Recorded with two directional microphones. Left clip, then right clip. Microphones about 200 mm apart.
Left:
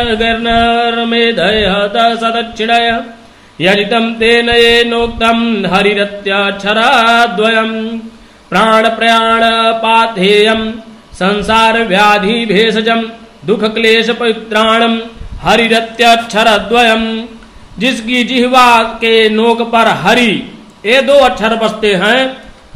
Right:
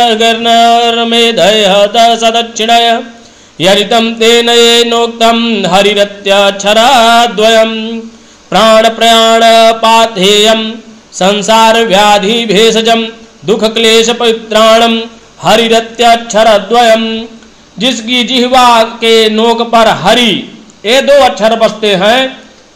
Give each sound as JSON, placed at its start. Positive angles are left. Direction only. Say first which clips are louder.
{"t": 0.0, "sound": "mantra", "louder": "right 5 dB", "side_deg": -25}